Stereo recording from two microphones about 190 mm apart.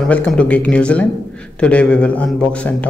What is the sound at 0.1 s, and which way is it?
A man's voice, 5° left (ahead or behind).